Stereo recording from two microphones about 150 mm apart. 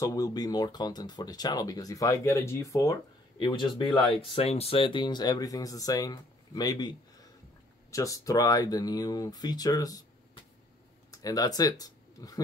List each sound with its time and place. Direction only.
0.0 s speech: 25° left (ahead or behind)
3.3 s speech: 35° left (ahead or behind)
11.8 s a sound: 25° left (ahead or behind)